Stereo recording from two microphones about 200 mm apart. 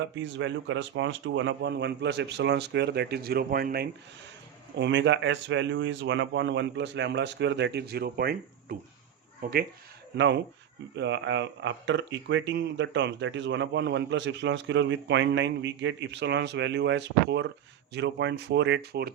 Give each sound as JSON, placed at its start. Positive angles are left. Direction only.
{"t": 0.2, "sound": "speech", "side_deg": -65}
{"t": 4.8, "sound": "speech", "side_deg": -65}
{"t": 10.2, "sound": "speech", "side_deg": -60}